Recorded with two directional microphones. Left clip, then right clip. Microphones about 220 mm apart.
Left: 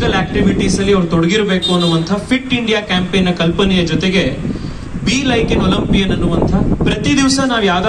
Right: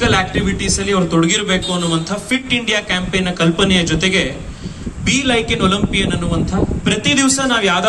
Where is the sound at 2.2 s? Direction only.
45° right (ahead or behind).